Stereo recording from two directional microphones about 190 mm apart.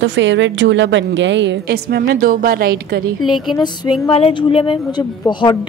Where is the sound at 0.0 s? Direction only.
75° right (ahead or behind); by 3.1 s 55° right (ahead or behind).